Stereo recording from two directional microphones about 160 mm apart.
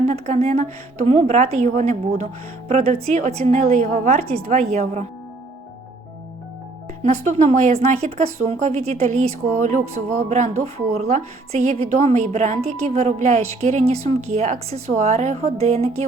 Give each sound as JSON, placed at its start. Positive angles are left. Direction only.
{"t": 0.1, "sound": "a woman's voice", "side_deg": -45}
{"t": 7.0, "sound": "a woman's voice", "side_deg": -45}